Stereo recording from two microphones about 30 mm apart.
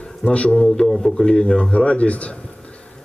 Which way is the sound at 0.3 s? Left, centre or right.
Left.